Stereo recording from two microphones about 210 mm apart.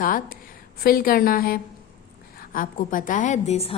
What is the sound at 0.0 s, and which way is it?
A woman's voice, 40° left (ahead or behind).